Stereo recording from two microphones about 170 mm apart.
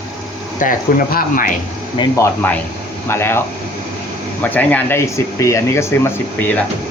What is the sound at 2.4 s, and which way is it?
Speech, 10° left (ahead or behind).